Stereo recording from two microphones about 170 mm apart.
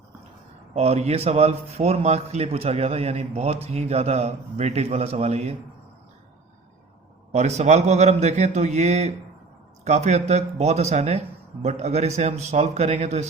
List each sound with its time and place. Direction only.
0.7 s a man's voice: 40° right (ahead or behind)
7.3 s a man's voice: 40° right (ahead or behind)